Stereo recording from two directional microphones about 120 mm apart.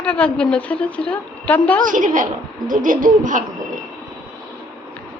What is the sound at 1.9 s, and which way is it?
Speech, 90° right.